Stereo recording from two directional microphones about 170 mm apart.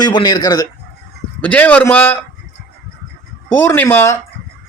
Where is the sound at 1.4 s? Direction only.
10° left (ahead or behind).